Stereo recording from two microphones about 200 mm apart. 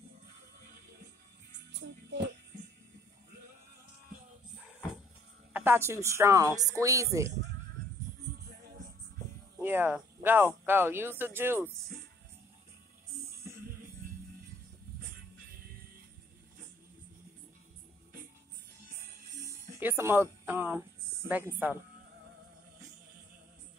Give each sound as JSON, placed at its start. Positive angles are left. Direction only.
{"t": 1.7, "sound": "music", "side_deg": -65}
{"t": 5.5, "sound": "a woman's voice", "side_deg": -10}
{"t": 9.6, "sound": "speech", "side_deg": -10}
{"t": 19.4, "sound": "music", "side_deg": -10}
{"t": 21.3, "sound": "a woman's voice", "side_deg": -10}